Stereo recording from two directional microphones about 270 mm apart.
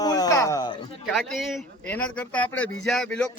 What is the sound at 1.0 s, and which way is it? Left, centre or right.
Speech, centre.